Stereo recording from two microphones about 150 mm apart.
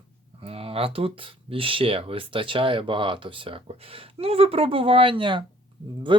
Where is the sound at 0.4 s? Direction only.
40° right (ahead or behind).